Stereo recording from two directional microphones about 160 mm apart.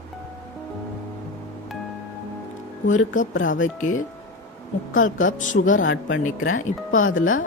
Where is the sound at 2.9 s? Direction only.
55° left (ahead or behind).